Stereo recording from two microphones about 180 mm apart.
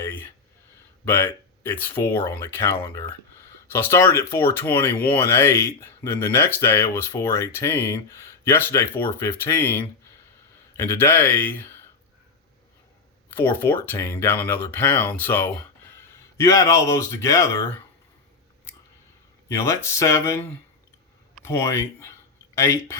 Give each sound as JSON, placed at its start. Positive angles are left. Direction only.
{"t": 0.0, "sound": "a sound", "side_deg": 10}
{"t": 1.0, "sound": "speech", "side_deg": 15}
{"t": 13.3, "sound": "speech", "side_deg": 10}
{"t": 19.5, "sound": "speech", "side_deg": 15}